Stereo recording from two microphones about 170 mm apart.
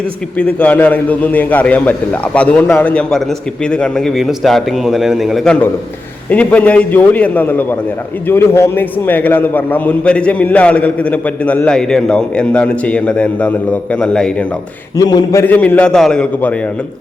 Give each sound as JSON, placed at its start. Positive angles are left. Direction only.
{"t": 0.3, "sound": "a man's voice", "side_deg": 10}
{"t": 14.9, "sound": "a man's voice", "side_deg": 20}
{"t": 15.4, "sound": "a man's voice", "side_deg": 10}